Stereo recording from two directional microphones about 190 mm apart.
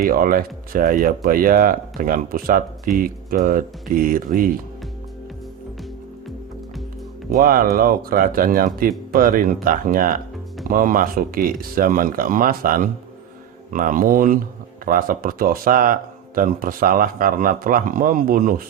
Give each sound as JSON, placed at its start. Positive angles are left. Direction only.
{"t": 0.0, "sound": "speech", "side_deg": -50}
{"t": 7.3, "sound": "speech", "side_deg": -50}